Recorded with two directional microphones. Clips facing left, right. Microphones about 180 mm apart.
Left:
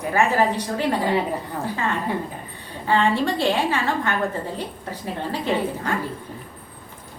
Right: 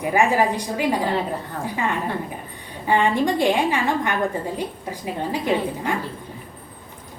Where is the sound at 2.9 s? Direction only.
15° right (ahead or behind).